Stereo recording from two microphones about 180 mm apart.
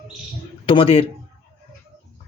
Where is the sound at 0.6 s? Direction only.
30° left (ahead or behind).